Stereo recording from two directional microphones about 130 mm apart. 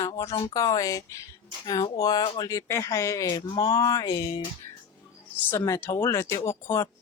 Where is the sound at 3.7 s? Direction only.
25° left (ahead or behind).